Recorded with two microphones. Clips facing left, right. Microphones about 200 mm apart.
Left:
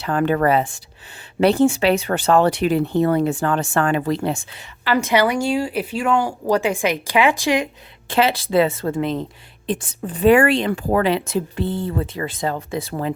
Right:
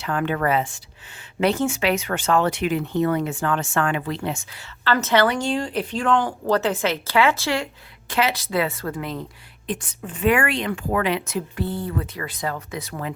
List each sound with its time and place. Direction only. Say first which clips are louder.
0.0 s speech: left 5 dB; 40° left (ahead or behind)
4.5 s a woman's voice: left 2 dB; 10° left (ahead or behind)
8.1 s speech: left 5 dB; 30° left (ahead or behind)